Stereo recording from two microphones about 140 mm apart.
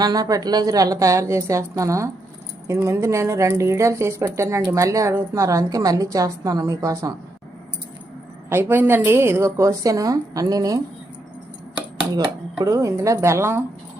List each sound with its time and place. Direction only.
0.0 s a woman's voice: 25° right (ahead or behind)
8.4 s a woman's voice: 15° right (ahead or behind)
12.6 s a woman's voice: 20° right (ahead or behind)